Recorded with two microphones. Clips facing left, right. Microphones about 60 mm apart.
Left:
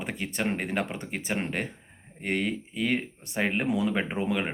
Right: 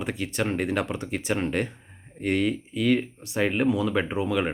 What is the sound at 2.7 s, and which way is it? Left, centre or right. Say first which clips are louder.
Speech: right 6 dB; left.